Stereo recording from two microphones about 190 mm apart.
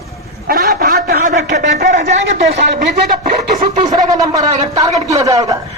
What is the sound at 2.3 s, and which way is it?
Speech, 60° right (ahead or behind).